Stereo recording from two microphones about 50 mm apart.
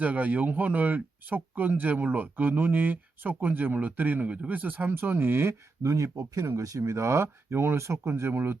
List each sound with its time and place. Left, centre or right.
0.0 s speech: right
4.9 s speech: right
6.3 s speech: right